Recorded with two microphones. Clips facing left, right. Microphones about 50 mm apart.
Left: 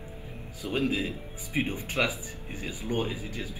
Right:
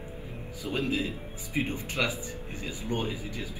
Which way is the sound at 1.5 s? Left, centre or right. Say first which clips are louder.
Left 1 dB; left.